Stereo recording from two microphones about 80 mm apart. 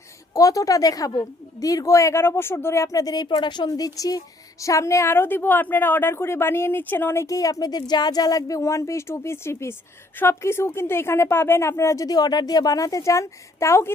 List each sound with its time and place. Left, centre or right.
0.3 s a woman's voice: left
3.2 s a woman's voice: left
7.3 s a woman's voice: left
12.0 s a woman's voice: left